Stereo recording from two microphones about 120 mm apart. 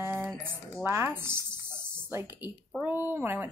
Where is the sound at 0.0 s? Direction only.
20° right (ahead or behind).